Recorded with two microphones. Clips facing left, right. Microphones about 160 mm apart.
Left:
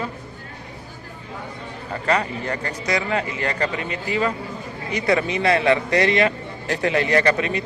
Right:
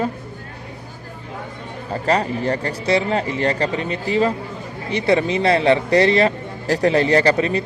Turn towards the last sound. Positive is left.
turn(degrees=-35)  # may be behind; listen again after turning